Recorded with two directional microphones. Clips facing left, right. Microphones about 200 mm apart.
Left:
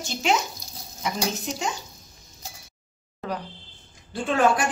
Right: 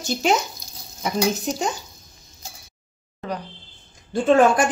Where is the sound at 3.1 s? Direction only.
5° left (ahead or behind).